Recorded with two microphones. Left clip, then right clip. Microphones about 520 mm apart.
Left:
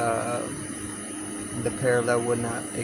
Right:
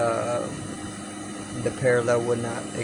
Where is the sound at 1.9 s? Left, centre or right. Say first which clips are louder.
Right 2 dB; left.